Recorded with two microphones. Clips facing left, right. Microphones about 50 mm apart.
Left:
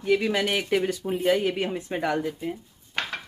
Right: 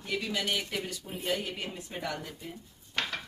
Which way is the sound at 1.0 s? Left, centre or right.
Left.